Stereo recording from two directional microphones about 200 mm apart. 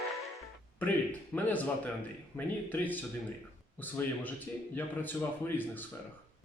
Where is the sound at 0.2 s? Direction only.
5° left (ahead or behind).